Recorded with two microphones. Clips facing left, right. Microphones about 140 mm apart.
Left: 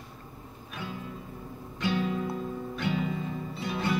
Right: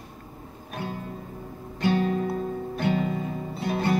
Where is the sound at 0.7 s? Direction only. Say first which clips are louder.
Right 5 dB; 50° right (ahead or behind).